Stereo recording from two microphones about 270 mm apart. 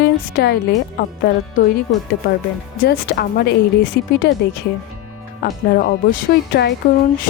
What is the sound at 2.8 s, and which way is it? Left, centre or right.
A woman's voice, left.